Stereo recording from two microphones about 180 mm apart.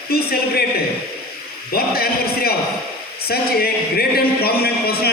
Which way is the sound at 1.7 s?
60° left (ahead or behind).